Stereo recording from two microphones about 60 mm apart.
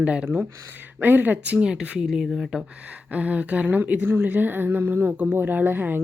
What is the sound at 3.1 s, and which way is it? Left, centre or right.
A woman's voice, right.